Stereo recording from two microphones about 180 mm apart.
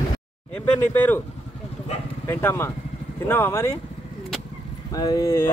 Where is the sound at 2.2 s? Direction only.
15° left (ahead or behind).